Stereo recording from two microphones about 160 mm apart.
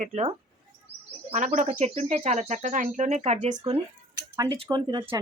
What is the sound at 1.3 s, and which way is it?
Speech, 50° right (ahead or behind).